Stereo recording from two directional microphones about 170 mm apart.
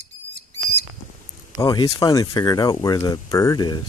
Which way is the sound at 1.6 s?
25° left (ahead or behind).